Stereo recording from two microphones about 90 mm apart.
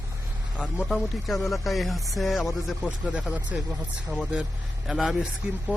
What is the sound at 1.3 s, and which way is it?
Speech, centre (ahead or behind).